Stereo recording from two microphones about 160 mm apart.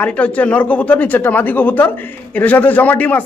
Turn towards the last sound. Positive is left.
turn(degrees=10)  # may be behind; listen again after turning